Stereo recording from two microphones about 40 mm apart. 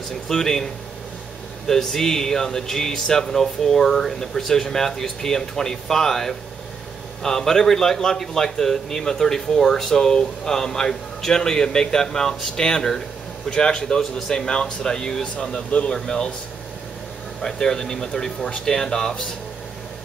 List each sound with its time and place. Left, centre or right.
0.3 s a man's voice: centre
1.7 s a man's voice: centre
15.4 s speech: left
17.4 s a man's voice: centre